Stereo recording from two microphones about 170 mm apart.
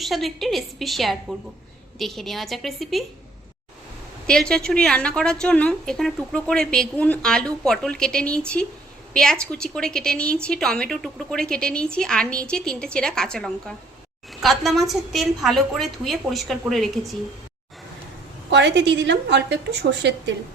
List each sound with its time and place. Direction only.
0.0 s a woman's voice: centre (ahead or behind)
4.3 s a woman's voice: 5° left (ahead or behind)
18.5 s a woman's voice: 90° right